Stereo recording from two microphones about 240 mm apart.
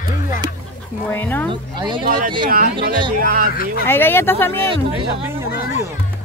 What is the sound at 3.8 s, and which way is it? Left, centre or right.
Speech, centre.